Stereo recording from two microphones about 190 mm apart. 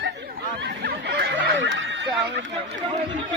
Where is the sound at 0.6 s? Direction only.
60° right (ahead or behind); by 2.0 s 75° right (ahead or behind).